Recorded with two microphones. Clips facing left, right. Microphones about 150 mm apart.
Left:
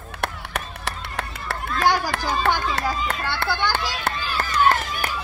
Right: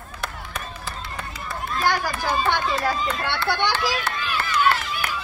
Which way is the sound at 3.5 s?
80° right.